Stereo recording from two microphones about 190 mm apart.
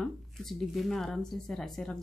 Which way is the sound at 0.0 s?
Centre (ahead or behind).